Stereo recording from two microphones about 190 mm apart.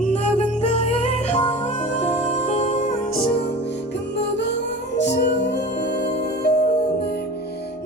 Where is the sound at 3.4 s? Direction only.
65° left (ahead or behind).